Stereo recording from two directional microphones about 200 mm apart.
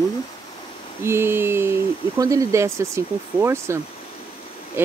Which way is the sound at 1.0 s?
10° right (ahead or behind).